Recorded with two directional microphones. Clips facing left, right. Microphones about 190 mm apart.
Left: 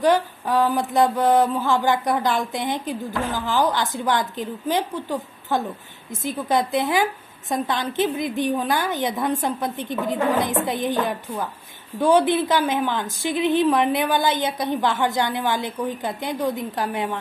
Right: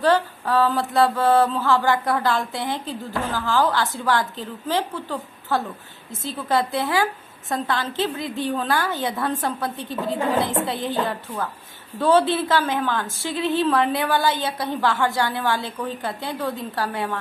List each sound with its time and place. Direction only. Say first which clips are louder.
0.0 s mantra: left 1 dB; 15° left (ahead or behind)